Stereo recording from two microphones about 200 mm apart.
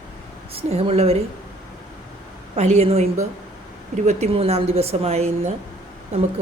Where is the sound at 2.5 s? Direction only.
35° right (ahead or behind).